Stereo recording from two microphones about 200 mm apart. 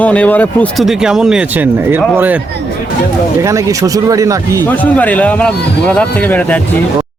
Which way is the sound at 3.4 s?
15° right (ahead or behind).